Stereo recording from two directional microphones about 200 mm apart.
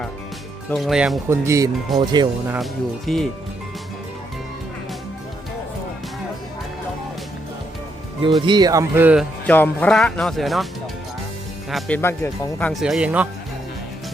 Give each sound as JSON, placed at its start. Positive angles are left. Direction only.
{"t": 0.7, "sound": "speech", "side_deg": 0}
{"t": 1.3, "sound": "speech", "side_deg": -15}
{"t": 3.1, "sound": "speech", "side_deg": 0}
{"t": 8.4, "sound": "speech", "side_deg": -20}
{"t": 9.5, "sound": "speech", "side_deg": 5}
{"t": 11.7, "sound": "speech", "side_deg": 10}
{"t": 12.8, "sound": "speech", "side_deg": -5}